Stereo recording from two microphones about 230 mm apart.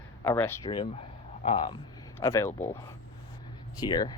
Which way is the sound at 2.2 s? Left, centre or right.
Centre.